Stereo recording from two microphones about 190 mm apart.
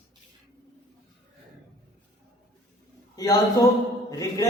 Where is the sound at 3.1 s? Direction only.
20° left (ahead or behind).